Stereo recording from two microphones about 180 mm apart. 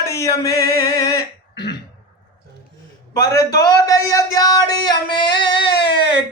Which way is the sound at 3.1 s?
20° left (ahead or behind).